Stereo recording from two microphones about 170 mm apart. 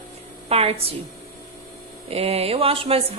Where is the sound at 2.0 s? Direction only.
35° right (ahead or behind).